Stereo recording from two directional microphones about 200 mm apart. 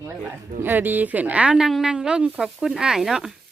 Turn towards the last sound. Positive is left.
turn(degrees=0)  # may be behind; listen again after turning